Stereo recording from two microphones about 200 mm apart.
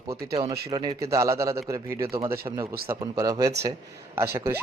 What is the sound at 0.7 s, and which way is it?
Speech, 20° right (ahead or behind).